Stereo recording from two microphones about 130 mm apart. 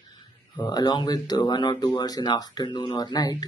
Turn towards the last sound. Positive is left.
turn(degrees=30)  # may be behind; listen again after turning